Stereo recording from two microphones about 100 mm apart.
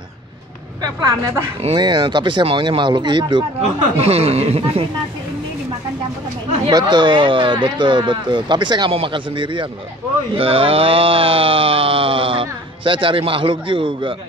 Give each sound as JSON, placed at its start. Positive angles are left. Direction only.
{"t": 1.0, "sound": "speech", "side_deg": -25}
{"t": 1.8, "sound": "speech", "side_deg": -50}
{"t": 4.0, "sound": "speech", "side_deg": -85}
{"t": 6.7, "sound": "speech", "side_deg": -45}
{"t": 8.9, "sound": "a sound", "side_deg": -60}
{"t": 10.3, "sound": "a sound", "side_deg": -70}